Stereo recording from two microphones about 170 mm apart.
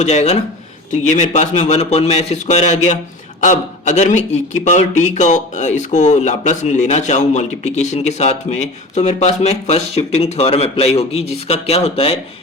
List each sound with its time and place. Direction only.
0.0 s a man's voice: 40° left (ahead or behind)